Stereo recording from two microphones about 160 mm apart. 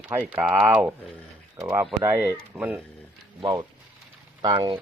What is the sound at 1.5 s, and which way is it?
Speech, 20° right (ahead or behind).